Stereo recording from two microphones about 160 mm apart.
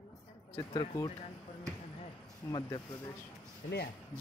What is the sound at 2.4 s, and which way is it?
Speech, 25° left (ahead or behind).